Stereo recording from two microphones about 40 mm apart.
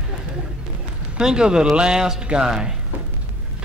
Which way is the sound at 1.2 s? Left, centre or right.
Centre.